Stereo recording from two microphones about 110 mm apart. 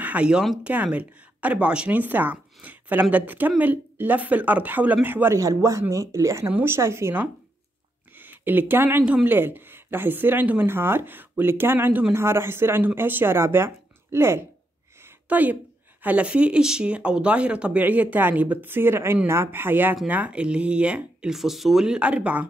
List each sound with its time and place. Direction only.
0.0 s speech: 10° right (ahead or behind)
15.0 s a sound: 15° right (ahead or behind)
16.0 s speech: 15° right (ahead or behind)